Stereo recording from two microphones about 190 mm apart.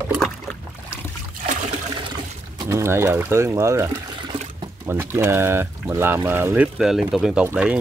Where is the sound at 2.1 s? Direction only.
20° right (ahead or behind).